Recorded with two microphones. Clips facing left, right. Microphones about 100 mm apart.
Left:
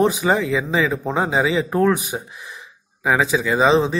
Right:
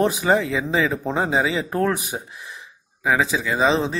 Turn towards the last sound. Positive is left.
turn(degrees=10)  # may be behind; listen again after turning